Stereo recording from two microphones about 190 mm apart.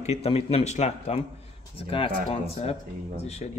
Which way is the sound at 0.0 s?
35° left (ahead or behind).